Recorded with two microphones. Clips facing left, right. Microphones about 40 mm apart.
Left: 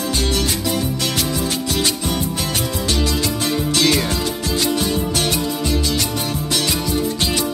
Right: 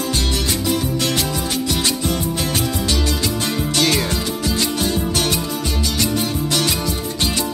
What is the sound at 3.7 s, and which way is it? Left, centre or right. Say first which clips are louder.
Music: left 1 dB; centre.